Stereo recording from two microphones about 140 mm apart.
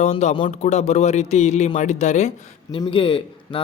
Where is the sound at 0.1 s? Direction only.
55° left (ahead or behind).